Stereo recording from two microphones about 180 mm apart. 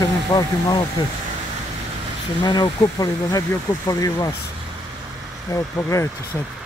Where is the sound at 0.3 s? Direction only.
20° left (ahead or behind).